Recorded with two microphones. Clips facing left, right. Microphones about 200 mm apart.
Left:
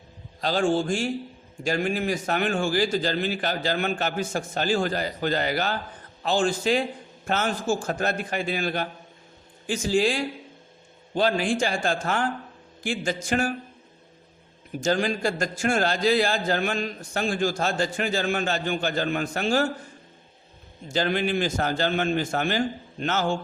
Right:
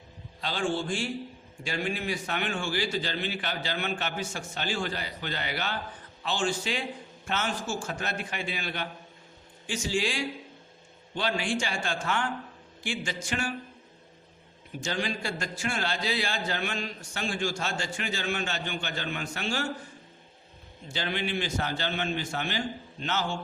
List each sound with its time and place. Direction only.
0.4 s a man's voice: 45° left (ahead or behind)
9.9 s a man's voice: 40° left (ahead or behind)
14.8 s a man's voice: 45° left (ahead or behind)
20.8 s a man's voice: 45° left (ahead or behind)